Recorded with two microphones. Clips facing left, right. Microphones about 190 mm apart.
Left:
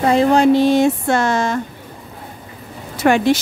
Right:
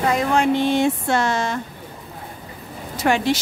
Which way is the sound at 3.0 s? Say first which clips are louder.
Left 5 dB; 60° left (ahead or behind).